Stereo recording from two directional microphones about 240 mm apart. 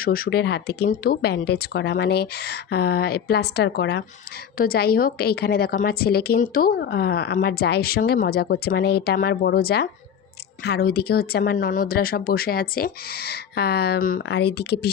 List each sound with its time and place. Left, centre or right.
0.0 s a woman's voice: left